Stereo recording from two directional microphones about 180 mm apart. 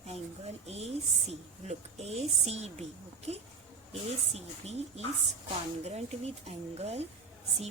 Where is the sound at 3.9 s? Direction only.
35° right (ahead or behind).